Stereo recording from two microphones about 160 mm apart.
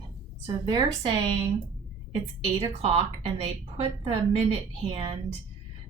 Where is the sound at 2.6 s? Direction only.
35° right (ahead or behind).